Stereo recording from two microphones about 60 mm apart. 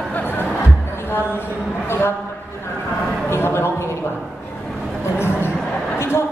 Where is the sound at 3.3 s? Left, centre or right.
Left.